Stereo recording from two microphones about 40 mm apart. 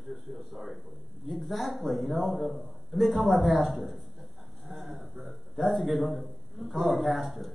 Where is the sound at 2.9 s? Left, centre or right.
Centre.